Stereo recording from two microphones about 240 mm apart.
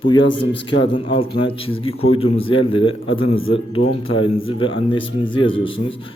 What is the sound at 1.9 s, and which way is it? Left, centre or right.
Speech, left.